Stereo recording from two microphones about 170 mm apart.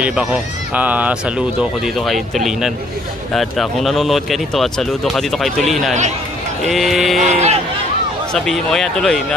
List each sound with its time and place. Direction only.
0.0 s speech: 5° right (ahead or behind)
7.2 s speech: 40° right (ahead or behind)
8.3 s speech: 5° left (ahead or behind)